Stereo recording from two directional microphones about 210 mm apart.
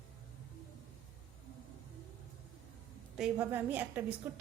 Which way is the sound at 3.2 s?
10° right (ahead or behind).